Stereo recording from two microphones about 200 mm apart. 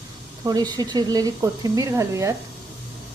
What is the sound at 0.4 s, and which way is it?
Speech, 20° right (ahead or behind).